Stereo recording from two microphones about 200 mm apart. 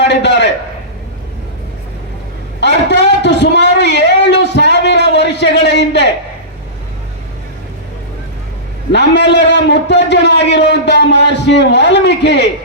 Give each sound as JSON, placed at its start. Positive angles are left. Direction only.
{"t": 0.0, "sound": "a man's voice", "side_deg": 60}
{"t": 2.6, "sound": "a sound", "side_deg": 60}
{"t": 8.9, "sound": "a man's voice", "side_deg": 60}